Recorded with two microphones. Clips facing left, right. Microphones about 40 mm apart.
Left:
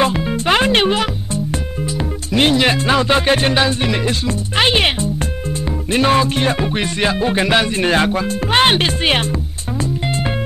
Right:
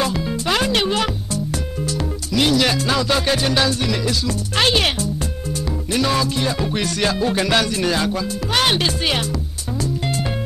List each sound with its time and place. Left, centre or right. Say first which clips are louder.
0.0 s music: left 5 dB; left
0.9 s music: left 2 dB; left
2.3 s music: left 3 dB; left
4.6 s speech: left 3 dB; left
5.9 s music: left 5 dB; left